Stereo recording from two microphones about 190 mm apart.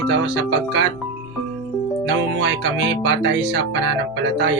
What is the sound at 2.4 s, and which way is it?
Speech, 75° right (ahead or behind).